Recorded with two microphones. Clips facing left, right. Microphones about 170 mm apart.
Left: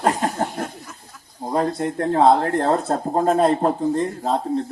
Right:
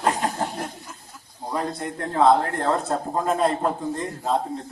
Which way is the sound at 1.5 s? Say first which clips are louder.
Left 6 dB; 35° left (ahead or behind).